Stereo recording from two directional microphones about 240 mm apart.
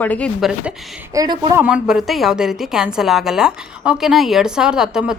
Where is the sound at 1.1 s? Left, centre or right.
Centre.